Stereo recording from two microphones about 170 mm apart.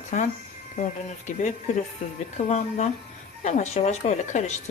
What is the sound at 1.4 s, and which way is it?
Speech, 45° left (ahead or behind).